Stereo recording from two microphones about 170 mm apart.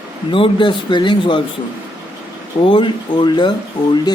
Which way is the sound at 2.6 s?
30° left (ahead or behind).